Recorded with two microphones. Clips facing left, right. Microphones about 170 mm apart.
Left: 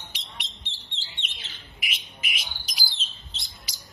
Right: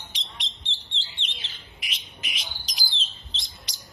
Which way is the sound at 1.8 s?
5° left (ahead or behind).